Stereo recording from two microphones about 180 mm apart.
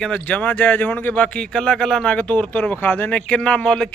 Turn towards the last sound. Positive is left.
turn(degrees=5)  # may be behind; listen again after turning